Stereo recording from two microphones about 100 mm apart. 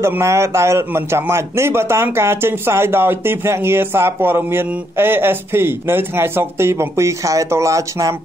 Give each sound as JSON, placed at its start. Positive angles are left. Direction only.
{"t": 0.0, "sound": "speech", "side_deg": -25}